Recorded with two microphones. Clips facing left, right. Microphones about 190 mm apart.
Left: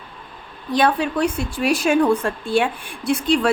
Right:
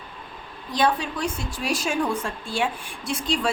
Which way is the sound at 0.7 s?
60° left (ahead or behind).